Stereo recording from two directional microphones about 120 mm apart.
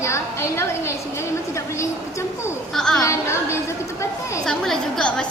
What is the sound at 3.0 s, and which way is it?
Speech, 25° left (ahead or behind).